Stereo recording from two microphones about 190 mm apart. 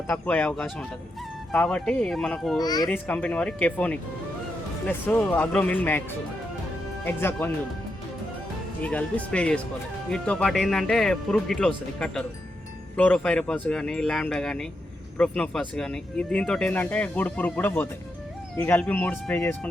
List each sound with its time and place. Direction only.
0.1 s speech: 5° left (ahead or behind)
2.6 s speech: 20° left (ahead or behind)
3.1 s speech: 5° left (ahead or behind)
8.8 s speech: 5° left (ahead or behind)